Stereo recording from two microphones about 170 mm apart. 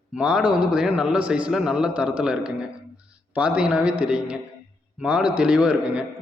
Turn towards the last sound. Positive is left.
turn(degrees=-5)  # may be behind; listen again after turning